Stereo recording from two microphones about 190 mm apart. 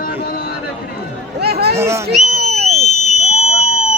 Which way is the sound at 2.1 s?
35° right (ahead or behind).